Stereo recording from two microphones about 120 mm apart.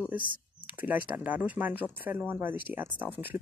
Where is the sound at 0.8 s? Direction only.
15° right (ahead or behind).